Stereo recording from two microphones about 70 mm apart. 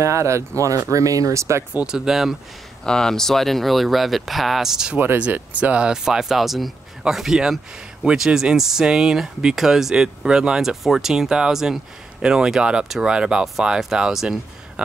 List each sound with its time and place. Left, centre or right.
0.0 s speech: right
1.9 s speech: centre
2.8 s speech: centre
4.9 s speech: right; by 14.4 s centre